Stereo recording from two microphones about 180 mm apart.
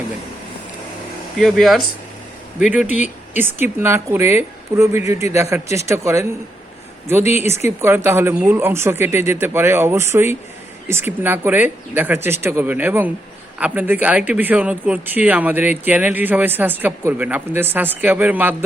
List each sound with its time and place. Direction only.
1.4 s speech: centre (ahead or behind); by 6.2 s 15° right (ahead or behind)
7.8 s speech: 15° right (ahead or behind)